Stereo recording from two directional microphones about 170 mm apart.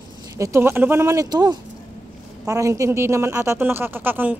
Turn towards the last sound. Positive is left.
turn(degrees=-10)  # may be behind; listen again after turning